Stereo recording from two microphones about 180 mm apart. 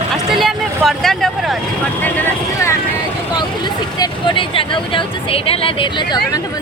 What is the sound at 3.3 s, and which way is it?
Speech, 25° left (ahead or behind).